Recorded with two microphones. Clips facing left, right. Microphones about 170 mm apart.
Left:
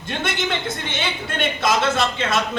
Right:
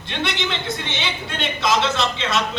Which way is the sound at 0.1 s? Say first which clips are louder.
Left 1 dB; 50° left (ahead or behind).